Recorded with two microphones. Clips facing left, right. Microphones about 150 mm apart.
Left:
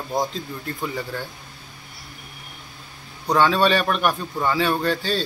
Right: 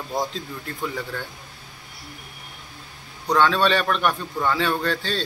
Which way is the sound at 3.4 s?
10° left (ahead or behind).